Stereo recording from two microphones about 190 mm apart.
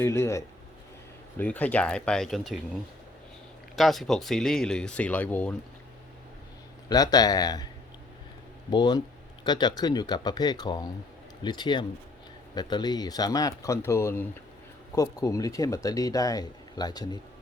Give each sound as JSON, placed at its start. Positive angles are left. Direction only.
{"t": 0.0, "sound": "speech", "side_deg": 15}
{"t": 3.8, "sound": "speech", "side_deg": 0}
{"t": 6.8, "sound": "speech", "side_deg": 20}
{"t": 8.7, "sound": "speech", "side_deg": 20}